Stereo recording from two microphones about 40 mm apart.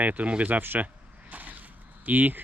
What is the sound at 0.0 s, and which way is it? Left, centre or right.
Speech, right.